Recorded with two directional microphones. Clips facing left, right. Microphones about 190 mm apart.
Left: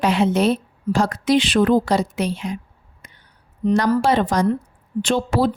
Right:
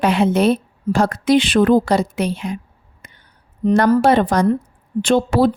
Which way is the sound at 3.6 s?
50° right (ahead or behind).